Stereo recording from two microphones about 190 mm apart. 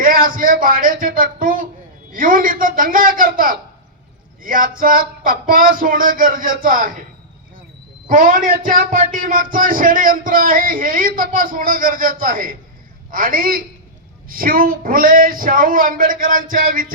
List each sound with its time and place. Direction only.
0.0 s speech: 50° right (ahead or behind)
8.0 s speech: 45° right (ahead or behind)